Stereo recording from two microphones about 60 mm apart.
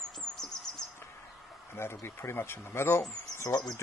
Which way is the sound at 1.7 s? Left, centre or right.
Left.